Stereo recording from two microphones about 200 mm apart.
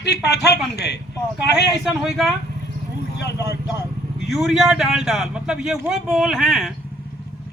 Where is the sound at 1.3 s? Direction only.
5° right (ahead or behind).